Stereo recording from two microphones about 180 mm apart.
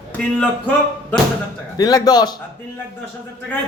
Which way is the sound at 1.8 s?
20° left (ahead or behind).